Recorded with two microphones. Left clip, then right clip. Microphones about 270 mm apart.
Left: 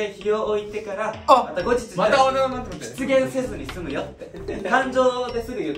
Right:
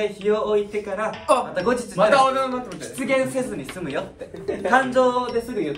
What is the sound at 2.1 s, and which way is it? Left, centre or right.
Speech, centre.